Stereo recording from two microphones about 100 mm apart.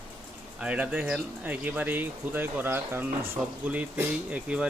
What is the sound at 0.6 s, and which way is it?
Speech, 10° right (ahead or behind).